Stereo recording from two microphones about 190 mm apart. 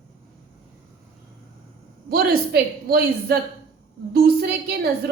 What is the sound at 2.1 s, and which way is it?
A woman's voice, 55° right (ahead or behind).